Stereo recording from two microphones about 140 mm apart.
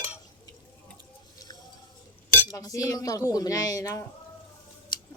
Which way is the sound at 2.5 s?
25° left (ahead or behind).